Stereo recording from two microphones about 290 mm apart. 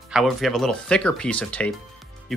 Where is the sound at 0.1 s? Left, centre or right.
Centre.